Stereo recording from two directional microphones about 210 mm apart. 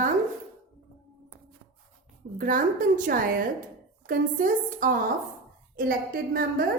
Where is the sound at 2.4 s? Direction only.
40° right (ahead or behind).